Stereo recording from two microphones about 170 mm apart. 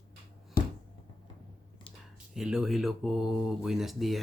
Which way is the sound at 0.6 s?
60° left (ahead or behind).